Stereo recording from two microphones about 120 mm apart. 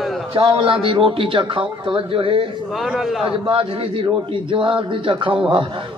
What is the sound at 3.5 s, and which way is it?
A man's voice, 45° right (ahead or behind).